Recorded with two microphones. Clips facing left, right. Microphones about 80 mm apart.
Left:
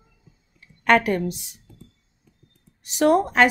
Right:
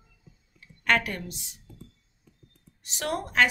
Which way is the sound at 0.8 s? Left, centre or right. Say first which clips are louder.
Left 7 dB; centre.